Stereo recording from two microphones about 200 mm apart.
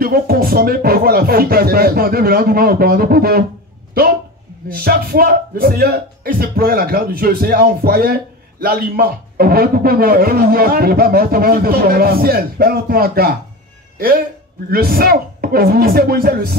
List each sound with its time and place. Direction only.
0.0 s speech: 50° right (ahead or behind)
4.6 s a man's voice: 50° right (ahead or behind)